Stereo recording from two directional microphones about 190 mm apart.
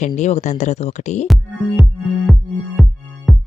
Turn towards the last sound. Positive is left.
turn(degrees=0)  # may be behind; listen again after turning